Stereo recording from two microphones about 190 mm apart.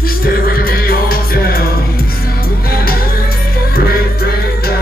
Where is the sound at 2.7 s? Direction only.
50° left (ahead or behind).